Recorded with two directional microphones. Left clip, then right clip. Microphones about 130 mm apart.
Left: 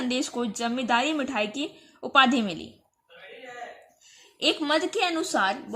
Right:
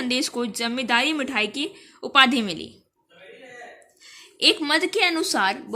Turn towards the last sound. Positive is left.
turn(degrees=5)  # may be behind; listen again after turning